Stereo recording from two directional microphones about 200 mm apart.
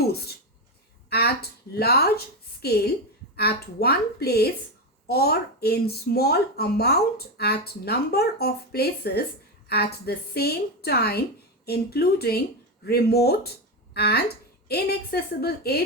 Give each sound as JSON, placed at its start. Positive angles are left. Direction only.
{"t": 0.1, "sound": "a woman's voice", "side_deg": 50}